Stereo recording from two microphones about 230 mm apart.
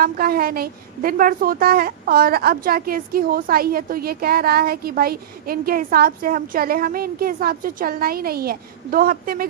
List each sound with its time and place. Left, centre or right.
0.0 s a woman's voice: right